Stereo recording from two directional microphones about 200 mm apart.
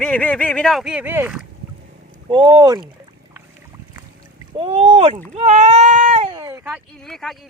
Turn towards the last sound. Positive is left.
turn(degrees=0)  # may be behind; listen again after turning